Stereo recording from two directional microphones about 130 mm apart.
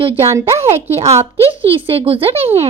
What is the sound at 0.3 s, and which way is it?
Speech, 20° right (ahead or behind).